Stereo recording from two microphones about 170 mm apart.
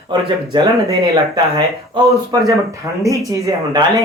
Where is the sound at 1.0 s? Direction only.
20° right (ahead or behind).